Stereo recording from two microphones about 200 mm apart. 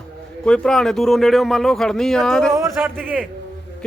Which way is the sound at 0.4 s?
5° left (ahead or behind).